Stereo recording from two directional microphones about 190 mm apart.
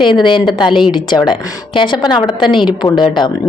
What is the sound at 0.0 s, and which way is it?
Speech, 25° left (ahead or behind).